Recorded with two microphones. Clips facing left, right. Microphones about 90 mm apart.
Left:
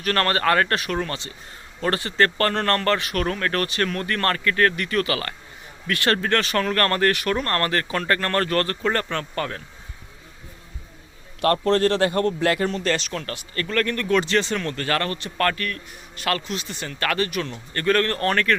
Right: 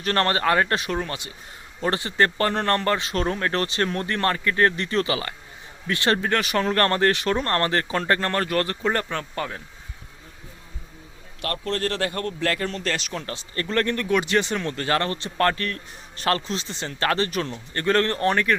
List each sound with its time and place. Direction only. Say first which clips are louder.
0.0 s speech: even; 20° right (ahead or behind)
8.4 s speech: left 2 dB; 10° right (ahead or behind)
11.3 s a man's voice: left 8 dB; 35° left (ahead or behind)
12.4 s speech: left 4 dB; 15° left (ahead or behind); by 13.2 s 5° right (ahead or behind)
13.2 s speech: even; 25° right (ahead or behind)